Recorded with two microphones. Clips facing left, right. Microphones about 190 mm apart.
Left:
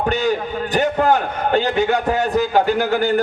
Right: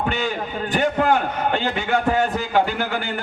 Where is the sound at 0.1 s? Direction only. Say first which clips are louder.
Left 5 dB; 40° left (ahead or behind).